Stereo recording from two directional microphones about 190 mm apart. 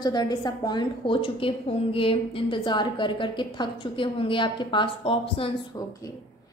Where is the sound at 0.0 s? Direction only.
20° left (ahead or behind).